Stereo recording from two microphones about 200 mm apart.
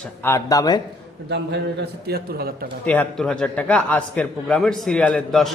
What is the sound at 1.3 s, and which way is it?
A man's voice, 60° right (ahead or behind).